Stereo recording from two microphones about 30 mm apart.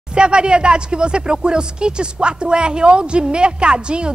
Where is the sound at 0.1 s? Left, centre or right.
Right.